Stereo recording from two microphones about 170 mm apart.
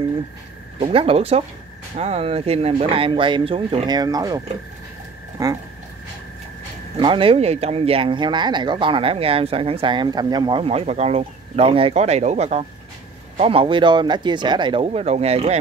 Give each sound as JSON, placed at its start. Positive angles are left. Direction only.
{"t": 0.7, "sound": "speech", "side_deg": -35}
{"t": 5.4, "sound": "speech", "side_deg": -20}
{"t": 7.0, "sound": "speech", "side_deg": -30}